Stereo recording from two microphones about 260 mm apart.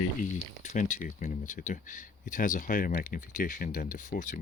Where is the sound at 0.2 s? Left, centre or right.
Left.